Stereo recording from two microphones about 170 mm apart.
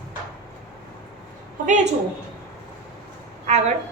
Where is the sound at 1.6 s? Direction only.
45° right (ahead or behind).